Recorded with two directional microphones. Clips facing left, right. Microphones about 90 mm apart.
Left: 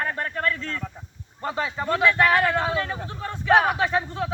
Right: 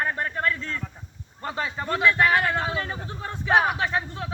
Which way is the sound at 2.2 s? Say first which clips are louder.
Left 2 dB; 10° right (ahead or behind).